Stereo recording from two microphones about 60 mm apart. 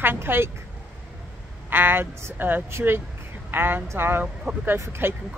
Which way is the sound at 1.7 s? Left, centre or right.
Right.